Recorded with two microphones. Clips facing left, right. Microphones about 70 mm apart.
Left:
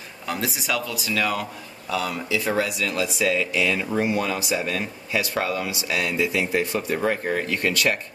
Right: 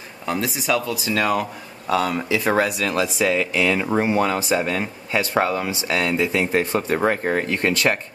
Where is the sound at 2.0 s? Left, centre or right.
Right.